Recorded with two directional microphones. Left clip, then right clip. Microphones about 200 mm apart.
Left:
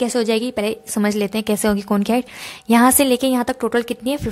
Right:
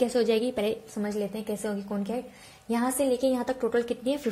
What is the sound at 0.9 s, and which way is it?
A woman's voice, 50° left (ahead or behind).